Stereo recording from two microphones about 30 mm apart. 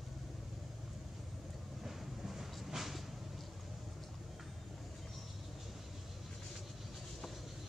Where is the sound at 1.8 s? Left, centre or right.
Centre.